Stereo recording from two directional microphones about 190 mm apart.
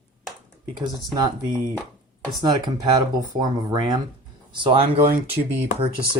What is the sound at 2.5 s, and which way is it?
Speech, 20° right (ahead or behind).